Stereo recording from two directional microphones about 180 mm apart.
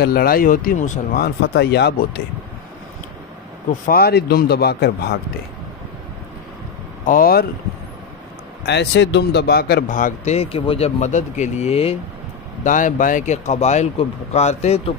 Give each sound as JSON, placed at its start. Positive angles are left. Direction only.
{"t": 0.0, "sound": "speech", "side_deg": 55}
{"t": 3.8, "sound": "speech", "side_deg": 60}
{"t": 7.1, "sound": "speech", "side_deg": 55}
{"t": 8.6, "sound": "speech", "side_deg": 75}
{"t": 12.6, "sound": "speech", "side_deg": 45}